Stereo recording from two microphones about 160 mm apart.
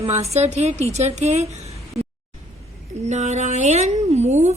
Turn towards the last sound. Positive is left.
turn(degrees=-45)  # may be behind; listen again after turning